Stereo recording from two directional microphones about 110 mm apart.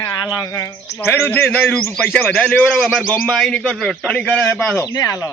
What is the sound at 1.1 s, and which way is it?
A man's voice, 20° left (ahead or behind).